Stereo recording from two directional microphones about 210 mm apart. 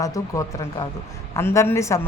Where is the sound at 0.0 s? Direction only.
15° left (ahead or behind).